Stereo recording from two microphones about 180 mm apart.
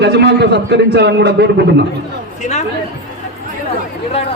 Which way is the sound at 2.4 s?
40° left (ahead or behind).